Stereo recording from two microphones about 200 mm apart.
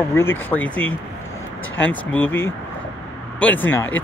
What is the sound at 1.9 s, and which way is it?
Speech, 10° left (ahead or behind).